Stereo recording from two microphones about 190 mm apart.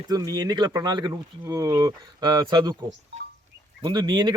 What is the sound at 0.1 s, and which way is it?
Speech, 20° right (ahead or behind).